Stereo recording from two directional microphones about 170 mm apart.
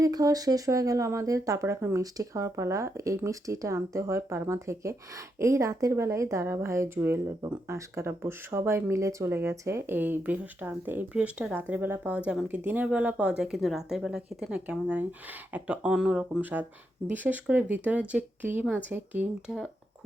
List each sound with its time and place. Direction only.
0.0 s speech: 20° right (ahead or behind)